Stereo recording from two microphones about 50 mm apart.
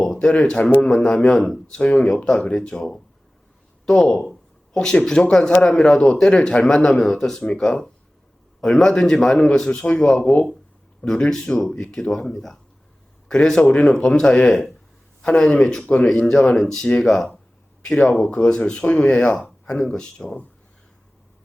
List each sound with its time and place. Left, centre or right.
0.2 s a man's voice: centre
1.6 s speech: centre
1.9 s a man's voice: centre
4.7 s a man's voice: centre
12.1 s a man's voice: centre
14.4 s a man's voice: centre
18.3 s speech: centre
20.0 s speech: centre